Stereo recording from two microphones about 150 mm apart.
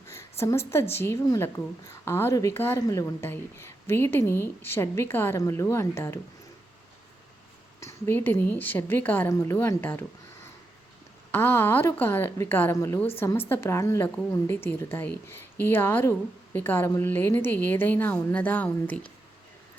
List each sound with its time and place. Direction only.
0.1 s a woman's voice: 20° left (ahead or behind)
7.8 s a woman's voice: 20° left (ahead or behind)
11.3 s a woman's voice: 15° left (ahead or behind)